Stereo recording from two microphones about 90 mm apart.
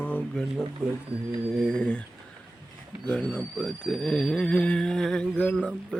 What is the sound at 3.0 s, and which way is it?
Speech, 10° left (ahead or behind).